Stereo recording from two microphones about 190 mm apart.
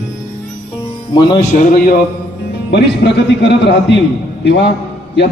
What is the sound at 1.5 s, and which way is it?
Speech, 45° left (ahead or behind).